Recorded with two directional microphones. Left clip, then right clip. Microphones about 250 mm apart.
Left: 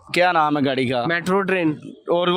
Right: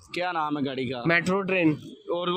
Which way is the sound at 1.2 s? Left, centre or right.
Left.